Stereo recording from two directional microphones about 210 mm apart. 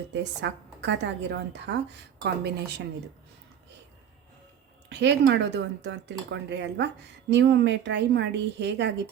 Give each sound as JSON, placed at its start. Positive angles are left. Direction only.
{"t": 0.1, "sound": "speech", "side_deg": -55}
{"t": 4.9, "sound": "speech", "side_deg": -55}